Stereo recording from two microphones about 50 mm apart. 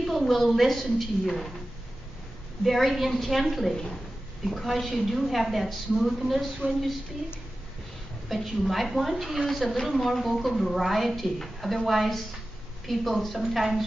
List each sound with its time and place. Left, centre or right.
0.0 s a woman's voice: centre
2.6 s a woman's voice: centre
6.6 s speech: right
8.3 s a woman's voice: centre